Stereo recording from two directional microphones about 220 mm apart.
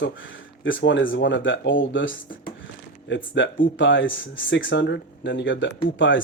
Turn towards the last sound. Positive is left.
turn(degrees=60)  # may be behind; listen again after turning